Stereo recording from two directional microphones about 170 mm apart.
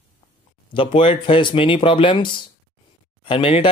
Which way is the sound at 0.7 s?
30° left (ahead or behind).